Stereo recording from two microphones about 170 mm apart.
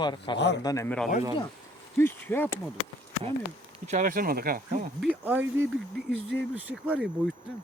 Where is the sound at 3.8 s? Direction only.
45° right (ahead or behind).